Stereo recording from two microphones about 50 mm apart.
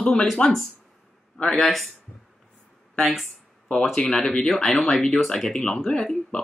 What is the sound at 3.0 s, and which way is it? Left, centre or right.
Speech, centre.